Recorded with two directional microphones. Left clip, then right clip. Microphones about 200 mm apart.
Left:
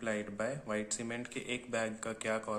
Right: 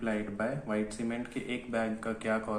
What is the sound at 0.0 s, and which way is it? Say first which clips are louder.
Speech: right 3 dB; 45° left (ahead or behind).